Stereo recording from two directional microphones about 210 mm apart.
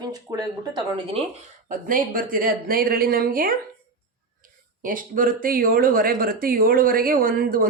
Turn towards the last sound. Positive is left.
turn(degrees=-45)  # may be behind; listen again after turning